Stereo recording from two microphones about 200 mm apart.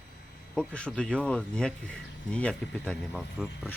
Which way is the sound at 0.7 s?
5° left (ahead or behind).